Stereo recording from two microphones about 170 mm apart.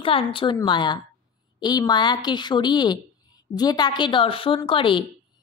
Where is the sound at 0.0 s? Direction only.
30° left (ahead or behind).